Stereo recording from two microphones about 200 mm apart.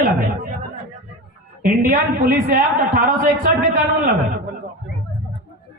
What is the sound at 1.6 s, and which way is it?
A woman's voice, 45° right (ahead or behind).